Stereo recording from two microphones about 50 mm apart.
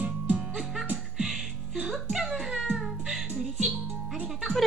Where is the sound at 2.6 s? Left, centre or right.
Centre.